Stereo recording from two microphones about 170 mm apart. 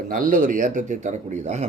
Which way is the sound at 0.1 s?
50° right (ahead or behind).